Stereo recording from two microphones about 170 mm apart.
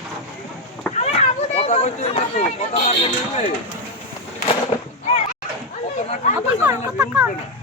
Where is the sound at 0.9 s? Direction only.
40° left (ahead or behind).